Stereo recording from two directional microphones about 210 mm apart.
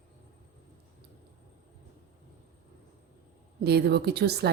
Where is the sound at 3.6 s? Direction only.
50° right (ahead or behind).